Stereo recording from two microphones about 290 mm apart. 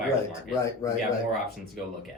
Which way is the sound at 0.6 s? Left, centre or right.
Centre.